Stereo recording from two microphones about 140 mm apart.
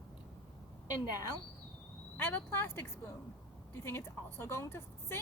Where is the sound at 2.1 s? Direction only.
15° left (ahead or behind).